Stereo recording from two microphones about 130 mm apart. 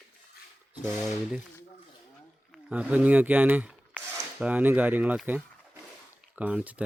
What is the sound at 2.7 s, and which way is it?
Speech, 10° right (ahead or behind).